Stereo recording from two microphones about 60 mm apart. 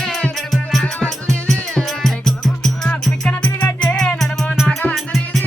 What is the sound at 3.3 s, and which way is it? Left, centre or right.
Music, left.